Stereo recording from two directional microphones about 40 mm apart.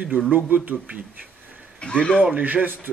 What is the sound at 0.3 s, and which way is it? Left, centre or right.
Speech, right.